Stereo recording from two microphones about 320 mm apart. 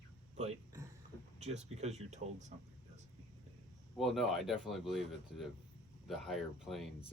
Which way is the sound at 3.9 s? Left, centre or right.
Centre.